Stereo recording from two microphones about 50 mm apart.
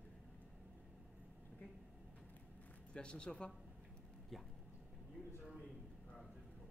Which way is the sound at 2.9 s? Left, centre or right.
Centre.